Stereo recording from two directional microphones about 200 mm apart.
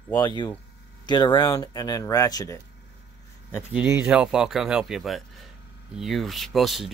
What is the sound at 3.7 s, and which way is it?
Speech, 5° right (ahead or behind).